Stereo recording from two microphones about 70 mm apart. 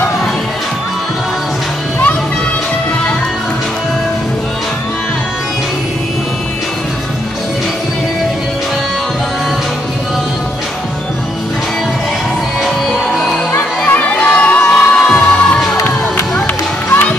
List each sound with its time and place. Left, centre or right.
13.6 s crowd: left